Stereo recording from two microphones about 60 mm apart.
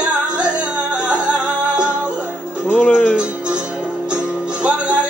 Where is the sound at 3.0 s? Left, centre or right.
Centre.